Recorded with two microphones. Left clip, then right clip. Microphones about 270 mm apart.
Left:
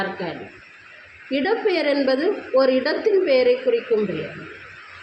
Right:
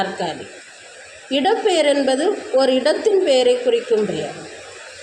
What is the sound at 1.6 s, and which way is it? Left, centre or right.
Speech, right.